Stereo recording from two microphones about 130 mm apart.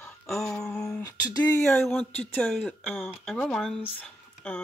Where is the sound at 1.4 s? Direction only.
10° left (ahead or behind).